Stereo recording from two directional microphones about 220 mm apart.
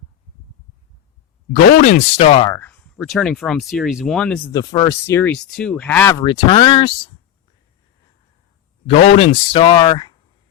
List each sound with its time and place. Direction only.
1.5 s speech: 35° left (ahead or behind)
2.6 s speech: 5° left (ahead or behind)
4.5 s speech: 20° left (ahead or behind)
8.9 s speech: 25° left (ahead or behind)